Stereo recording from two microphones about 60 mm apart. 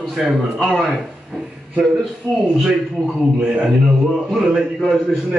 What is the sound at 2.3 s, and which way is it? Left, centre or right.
Speech, left.